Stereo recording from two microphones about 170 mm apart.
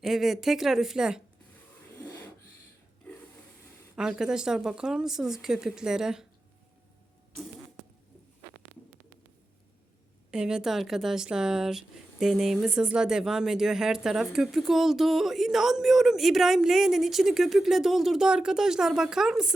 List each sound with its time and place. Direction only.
0.0 s speech: centre (ahead or behind)
3.9 s speech: 5° right (ahead or behind)
10.3 s speech: 5° right (ahead or behind)